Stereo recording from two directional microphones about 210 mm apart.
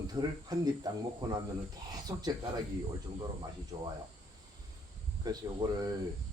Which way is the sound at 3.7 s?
25° right (ahead or behind).